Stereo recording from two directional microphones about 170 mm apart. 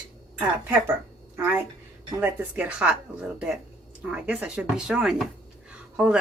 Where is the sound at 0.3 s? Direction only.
15° right (ahead or behind).